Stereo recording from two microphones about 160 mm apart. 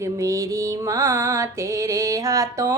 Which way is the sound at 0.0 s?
20° right (ahead or behind).